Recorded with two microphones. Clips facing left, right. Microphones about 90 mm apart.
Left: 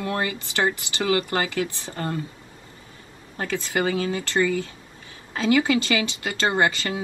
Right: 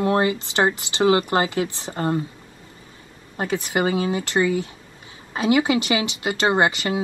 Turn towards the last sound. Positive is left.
turn(degrees=-20)  # may be behind; listen again after turning